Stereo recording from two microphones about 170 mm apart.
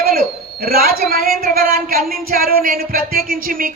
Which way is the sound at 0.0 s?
60° right (ahead or behind).